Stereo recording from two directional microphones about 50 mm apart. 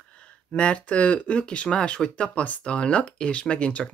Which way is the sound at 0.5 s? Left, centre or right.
Left.